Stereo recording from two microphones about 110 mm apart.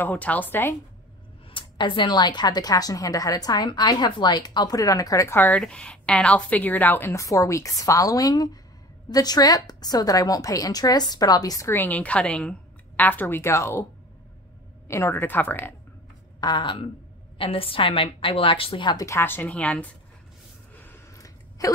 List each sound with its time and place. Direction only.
0.0 s a woman's voice: 15° left (ahead or behind)
1.5 s speech: 50° left (ahead or behind); by 5.4 s 30° left (ahead or behind)
5.4 s a woman's voice: 10° left (ahead or behind); by 11.7 s 35° left (ahead or behind)
11.7 s a woman's voice: 15° left (ahead or behind)
14.9 s a woman's voice: 25° left (ahead or behind)
16.3 s speech: 40° left (ahead or behind)
17.4 s a woman's voice: 55° left (ahead or behind)
18.9 s a woman's voice: 25° left (ahead or behind)
20.8 s a sound: 25° left (ahead or behind)